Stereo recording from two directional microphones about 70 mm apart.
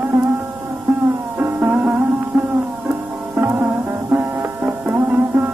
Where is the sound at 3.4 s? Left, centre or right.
Right.